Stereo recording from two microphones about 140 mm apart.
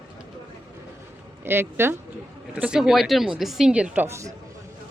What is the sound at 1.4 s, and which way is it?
A woman's voice, 15° right (ahead or behind).